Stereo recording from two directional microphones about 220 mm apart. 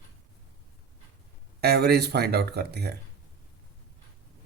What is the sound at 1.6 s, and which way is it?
Speech, 45° right (ahead or behind).